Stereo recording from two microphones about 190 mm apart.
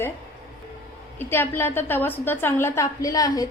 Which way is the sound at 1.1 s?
10° left (ahead or behind).